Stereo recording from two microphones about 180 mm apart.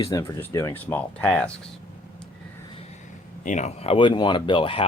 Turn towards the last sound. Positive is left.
turn(degrees=30)  # may be behind; listen again after turning